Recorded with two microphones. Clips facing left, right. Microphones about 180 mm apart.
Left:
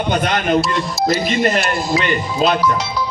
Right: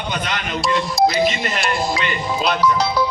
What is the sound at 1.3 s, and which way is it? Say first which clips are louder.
A man's voice: left 5 dB; 45° left (ahead or behind).